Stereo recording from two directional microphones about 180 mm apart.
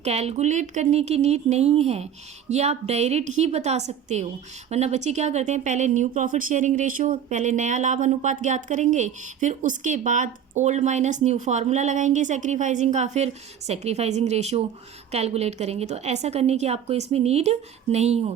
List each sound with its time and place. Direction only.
0.0 s speech: 35° right (ahead or behind)